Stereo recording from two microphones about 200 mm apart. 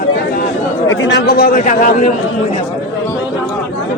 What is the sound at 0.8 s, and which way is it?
A man's voice, 60° left (ahead or behind).